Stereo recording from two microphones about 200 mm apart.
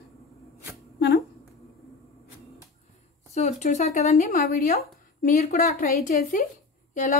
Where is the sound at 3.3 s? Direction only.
35° left (ahead or behind).